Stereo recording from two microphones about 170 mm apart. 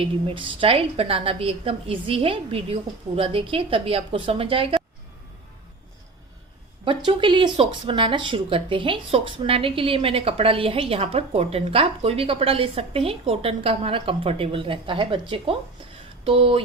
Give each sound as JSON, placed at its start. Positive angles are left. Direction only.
{"t": 0.0, "sound": "speech", "side_deg": -30}
{"t": 6.8, "sound": "speech", "side_deg": -30}